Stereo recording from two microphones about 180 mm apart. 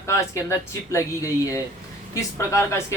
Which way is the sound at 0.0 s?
15° left (ahead or behind).